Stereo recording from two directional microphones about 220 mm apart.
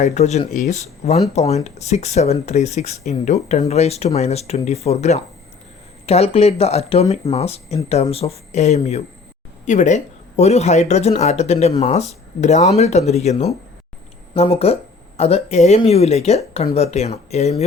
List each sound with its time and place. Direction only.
0.0 s speech: 30° left (ahead or behind)